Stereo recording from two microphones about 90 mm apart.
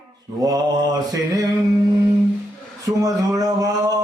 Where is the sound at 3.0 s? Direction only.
45° right (ahead or behind).